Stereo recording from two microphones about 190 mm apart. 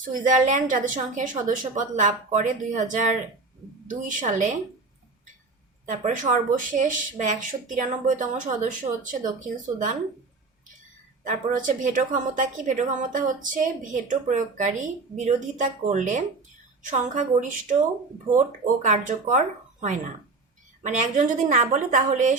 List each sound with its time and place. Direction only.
0.0 s a woman's voice: 45° right (ahead or behind)
5.9 s a woman's voice: 40° right (ahead or behind)
11.2 s a woman's voice: 45° right (ahead or behind)
18.3 s a woman's voice: 40° right (ahead or behind)
20.8 s a woman's voice: 40° right (ahead or behind)